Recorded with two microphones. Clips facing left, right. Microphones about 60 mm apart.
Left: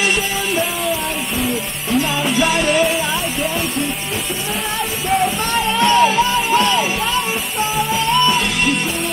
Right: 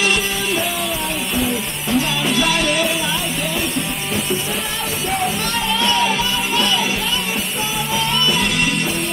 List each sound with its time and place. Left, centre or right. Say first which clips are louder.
2.3 s music: left 2 dB; centre
5.7 s music: left 5 dB; left
7.9 s music: left 3 dB; left